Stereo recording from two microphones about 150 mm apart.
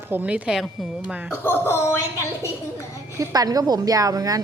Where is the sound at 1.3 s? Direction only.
15° left (ahead or behind).